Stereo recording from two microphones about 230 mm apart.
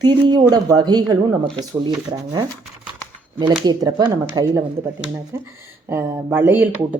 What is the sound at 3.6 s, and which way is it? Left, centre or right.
Speech, centre.